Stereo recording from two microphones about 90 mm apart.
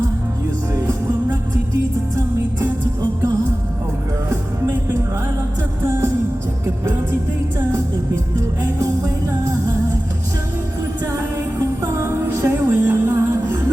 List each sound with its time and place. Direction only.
0.8 s music: 40° right (ahead or behind)
11.8 s music: 30° right (ahead or behind)